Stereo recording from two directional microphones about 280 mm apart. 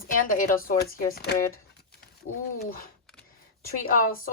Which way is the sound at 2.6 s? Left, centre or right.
Left.